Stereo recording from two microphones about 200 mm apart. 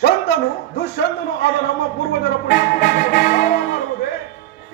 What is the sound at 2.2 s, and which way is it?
Music, 50° left (ahead or behind).